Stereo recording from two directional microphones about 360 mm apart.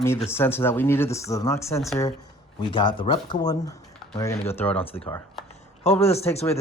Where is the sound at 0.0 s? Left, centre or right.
Centre.